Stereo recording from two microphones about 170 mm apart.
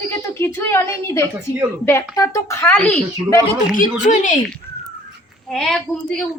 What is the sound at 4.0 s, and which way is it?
Speech, 45° left (ahead or behind).